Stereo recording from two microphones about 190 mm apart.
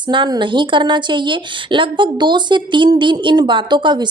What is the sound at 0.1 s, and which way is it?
A woman's voice, 25° right (ahead or behind).